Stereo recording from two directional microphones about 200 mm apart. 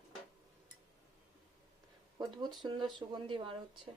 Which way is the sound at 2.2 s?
20° right (ahead or behind).